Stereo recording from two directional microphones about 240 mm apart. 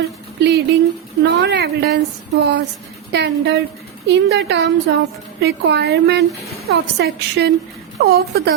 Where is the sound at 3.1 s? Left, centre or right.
Right.